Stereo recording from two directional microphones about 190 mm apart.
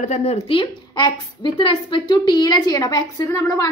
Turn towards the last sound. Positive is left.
turn(degrees=15)  # may be behind; listen again after turning